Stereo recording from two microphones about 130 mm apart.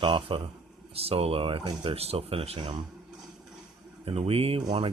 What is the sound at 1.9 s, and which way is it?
Speech, 50° right (ahead or behind).